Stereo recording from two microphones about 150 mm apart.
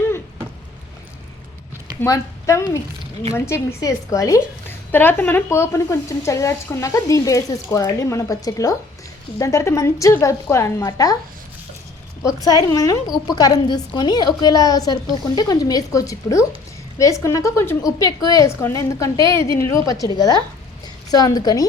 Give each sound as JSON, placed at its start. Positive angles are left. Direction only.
{"t": 2.0, "sound": "speech", "side_deg": 20}
{"t": 12.5, "sound": "speech", "side_deg": 25}